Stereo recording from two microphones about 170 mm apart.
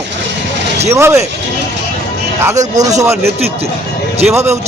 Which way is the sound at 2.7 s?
20° right (ahead or behind).